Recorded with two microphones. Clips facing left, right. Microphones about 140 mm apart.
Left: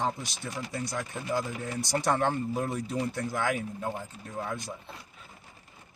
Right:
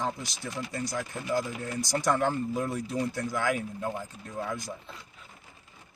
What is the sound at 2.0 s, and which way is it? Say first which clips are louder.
Speech: even; 60° left (ahead or behind).